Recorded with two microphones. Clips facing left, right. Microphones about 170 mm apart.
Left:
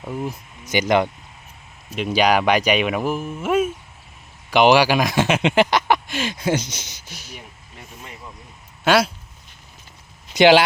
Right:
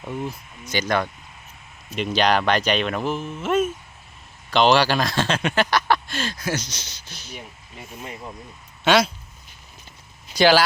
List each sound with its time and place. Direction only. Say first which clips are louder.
0.0 s speech: left 2 dB; 5° left (ahead or behind)
0.7 s speech: left 5 dB; 15° left (ahead or behind)
8.8 s speech: left 1 dB; 5° left (ahead or behind)
10.3 s speech: left 4 dB; 20° left (ahead or behind)